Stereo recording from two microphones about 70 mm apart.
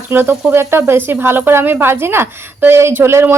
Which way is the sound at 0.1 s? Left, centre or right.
Right.